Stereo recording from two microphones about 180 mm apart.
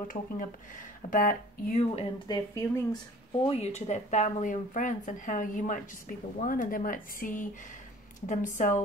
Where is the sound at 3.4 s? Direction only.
35° left (ahead or behind).